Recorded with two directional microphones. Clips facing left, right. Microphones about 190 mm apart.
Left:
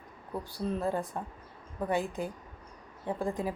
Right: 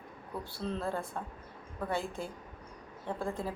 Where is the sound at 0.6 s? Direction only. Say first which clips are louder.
Left 4 dB; 15° left (ahead or behind).